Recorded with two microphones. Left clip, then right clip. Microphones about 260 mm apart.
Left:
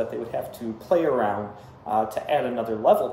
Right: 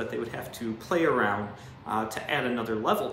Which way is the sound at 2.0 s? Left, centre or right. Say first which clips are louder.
Left 6 dB; centre.